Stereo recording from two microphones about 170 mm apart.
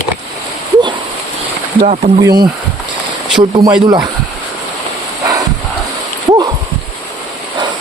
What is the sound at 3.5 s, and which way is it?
Speech, 25° right (ahead or behind).